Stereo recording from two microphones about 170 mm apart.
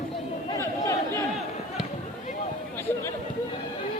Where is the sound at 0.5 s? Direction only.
15° left (ahead or behind).